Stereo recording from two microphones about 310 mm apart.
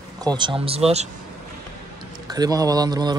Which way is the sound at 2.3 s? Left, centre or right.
Centre.